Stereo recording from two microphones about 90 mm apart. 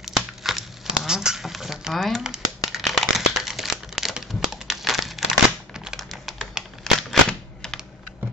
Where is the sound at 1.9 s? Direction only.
5° left (ahead or behind).